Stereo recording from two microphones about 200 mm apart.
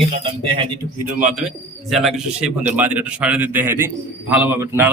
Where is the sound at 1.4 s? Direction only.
Centre (ahead or behind).